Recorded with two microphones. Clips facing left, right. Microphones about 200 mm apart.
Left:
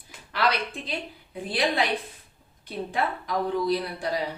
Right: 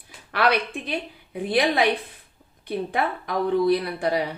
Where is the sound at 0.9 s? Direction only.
60° right (ahead or behind).